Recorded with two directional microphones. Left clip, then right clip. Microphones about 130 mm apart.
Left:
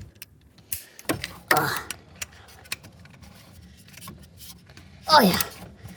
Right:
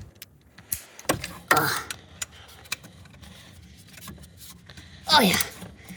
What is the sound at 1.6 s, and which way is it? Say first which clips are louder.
Tick-tock: right 1 dB; 15° left (ahead or behind).